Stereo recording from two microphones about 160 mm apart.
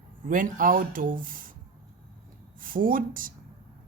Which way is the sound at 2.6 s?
60° right (ahead or behind).